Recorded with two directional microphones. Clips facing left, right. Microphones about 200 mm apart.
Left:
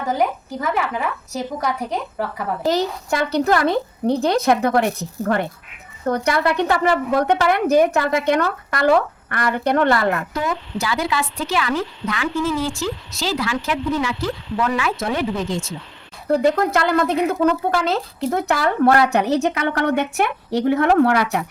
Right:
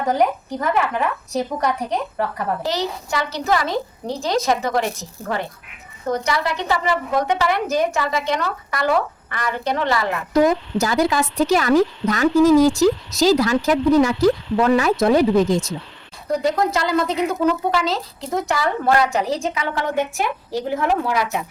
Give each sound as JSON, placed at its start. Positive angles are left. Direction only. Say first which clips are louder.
{"t": 0.1, "sound": "a woman's voice", "louder": "right 2 dB", "side_deg": 5}
{"t": 2.6, "sound": "a woman's voice", "louder": "left 4 dB", "side_deg": 50}
{"t": 10.3, "sound": "a woman's voice", "louder": "right 8 dB", "side_deg": -40}
{"t": 16.3, "sound": "a woman's voice", "louder": "left 3 dB", "side_deg": 55}